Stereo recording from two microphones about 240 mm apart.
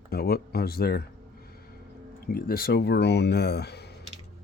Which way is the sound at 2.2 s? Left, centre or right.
Left.